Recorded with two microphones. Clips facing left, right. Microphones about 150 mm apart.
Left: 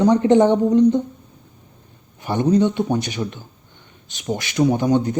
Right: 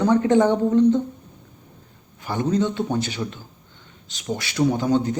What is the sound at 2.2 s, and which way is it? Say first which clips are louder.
A man's voice: left 5 dB; 20° left (ahead or behind).